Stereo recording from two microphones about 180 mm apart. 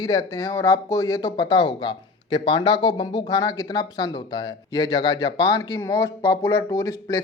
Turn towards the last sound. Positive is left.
turn(degrees=15)  # may be behind; listen again after turning